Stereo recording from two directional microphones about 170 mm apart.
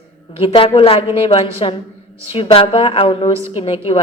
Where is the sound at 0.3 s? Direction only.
35° left (ahead or behind).